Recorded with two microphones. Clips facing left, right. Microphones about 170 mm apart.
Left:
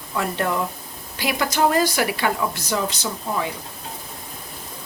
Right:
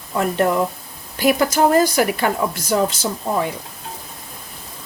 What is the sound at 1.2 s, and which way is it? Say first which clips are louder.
A woman's voice: right 5 dB; 45° right (ahead or behind).